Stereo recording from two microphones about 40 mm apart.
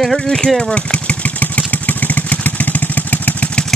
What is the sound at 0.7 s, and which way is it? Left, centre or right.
Vehicle, left.